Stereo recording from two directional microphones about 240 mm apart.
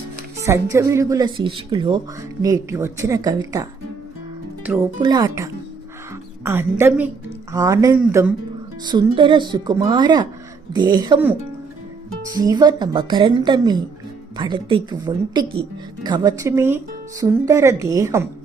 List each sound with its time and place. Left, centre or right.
0.4 s speech: centre
4.9 s speech: centre
8.8 s a woman's voice: centre